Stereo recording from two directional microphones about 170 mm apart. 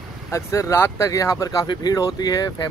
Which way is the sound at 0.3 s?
15° left (ahead or behind).